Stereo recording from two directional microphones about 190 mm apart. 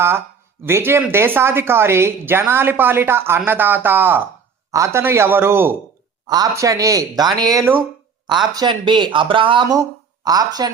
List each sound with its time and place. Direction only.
0.6 s a woman's voice: 10° right (ahead or behind)